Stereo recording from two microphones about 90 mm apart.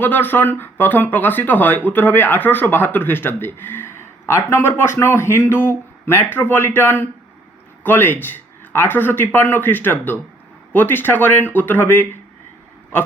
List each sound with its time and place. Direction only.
0.0 s speech: 20° left (ahead or behind)